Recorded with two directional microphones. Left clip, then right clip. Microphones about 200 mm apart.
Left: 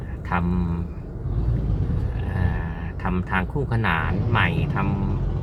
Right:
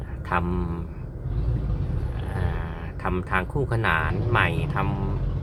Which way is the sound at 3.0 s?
10° right (ahead or behind).